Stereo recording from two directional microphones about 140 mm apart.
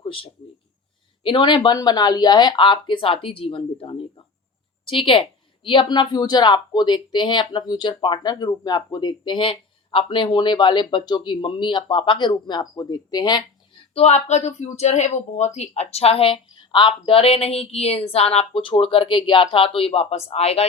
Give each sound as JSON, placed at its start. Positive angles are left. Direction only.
{"t": 0.0, "sound": "a sound", "side_deg": 40}
{"t": 1.2, "sound": "a woman's voice", "side_deg": 35}
{"t": 13.9, "sound": "speech", "side_deg": 50}